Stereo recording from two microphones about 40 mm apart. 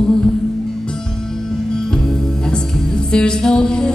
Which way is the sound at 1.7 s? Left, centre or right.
Centre.